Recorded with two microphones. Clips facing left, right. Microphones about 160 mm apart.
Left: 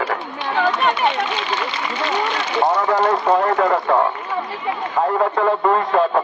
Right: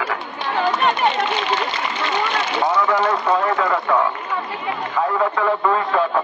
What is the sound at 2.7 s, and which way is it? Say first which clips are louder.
Speech: even; 40° left (ahead or behind).